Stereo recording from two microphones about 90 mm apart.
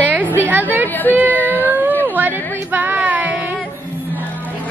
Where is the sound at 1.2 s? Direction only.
20° left (ahead or behind).